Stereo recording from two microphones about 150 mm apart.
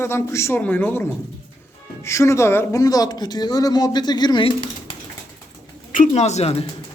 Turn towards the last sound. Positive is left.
turn(degrees=40)  # may be behind; listen again after turning